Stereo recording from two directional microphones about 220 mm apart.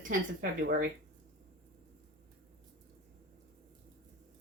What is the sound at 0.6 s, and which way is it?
Speech, 40° right (ahead or behind).